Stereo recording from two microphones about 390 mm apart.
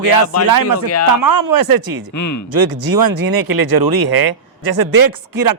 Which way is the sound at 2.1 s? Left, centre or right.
Left.